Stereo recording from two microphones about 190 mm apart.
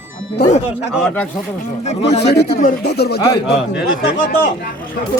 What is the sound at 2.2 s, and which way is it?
Speech, 60° left (ahead or behind).